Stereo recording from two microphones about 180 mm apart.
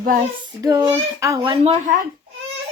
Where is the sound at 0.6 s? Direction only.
20° right (ahead or behind).